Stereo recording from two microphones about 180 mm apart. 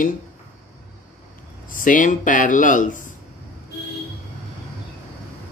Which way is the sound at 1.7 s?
45° left (ahead or behind).